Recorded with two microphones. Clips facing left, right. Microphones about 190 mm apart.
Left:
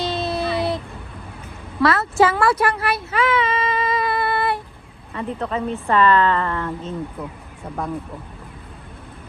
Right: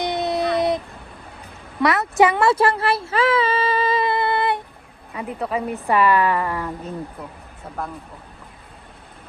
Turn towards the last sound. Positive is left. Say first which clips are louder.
# left 3 dB
turn(degrees=0)  # may be behind; listen again after turning